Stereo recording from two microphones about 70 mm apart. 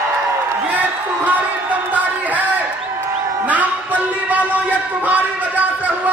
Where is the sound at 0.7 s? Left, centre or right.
Right.